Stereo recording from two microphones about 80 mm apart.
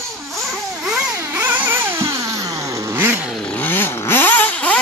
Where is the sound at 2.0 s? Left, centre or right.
Right.